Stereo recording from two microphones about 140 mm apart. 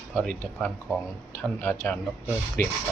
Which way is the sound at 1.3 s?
15° left (ahead or behind).